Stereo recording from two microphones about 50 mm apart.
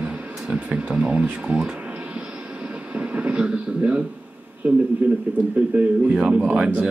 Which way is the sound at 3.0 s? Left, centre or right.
Right.